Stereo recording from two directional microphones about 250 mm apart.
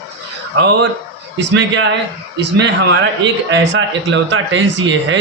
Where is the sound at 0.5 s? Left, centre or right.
Right.